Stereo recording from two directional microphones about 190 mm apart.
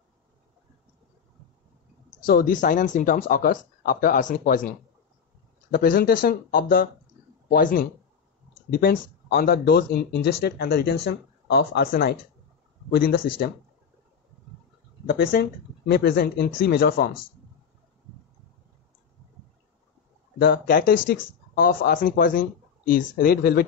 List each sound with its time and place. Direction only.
2.2 s speech: 50° left (ahead or behind)
15.0 s speech: 55° left (ahead or behind)
20.3 s speech: 50° left (ahead or behind)